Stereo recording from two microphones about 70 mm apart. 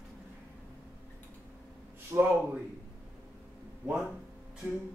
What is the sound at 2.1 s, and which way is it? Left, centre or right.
Speech, right.